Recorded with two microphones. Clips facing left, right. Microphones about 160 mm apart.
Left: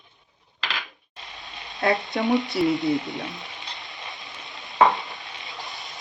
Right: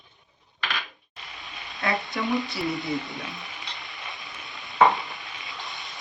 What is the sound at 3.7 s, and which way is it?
Vehicle, centre (ahead or behind).